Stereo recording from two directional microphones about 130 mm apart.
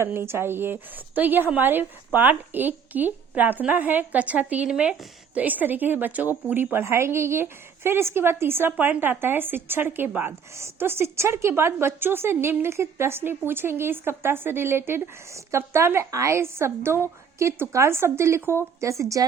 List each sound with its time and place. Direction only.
0.0 s a woman's voice: 20° right (ahead or behind)